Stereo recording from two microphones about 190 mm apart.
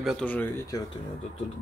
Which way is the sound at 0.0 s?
5° left (ahead or behind).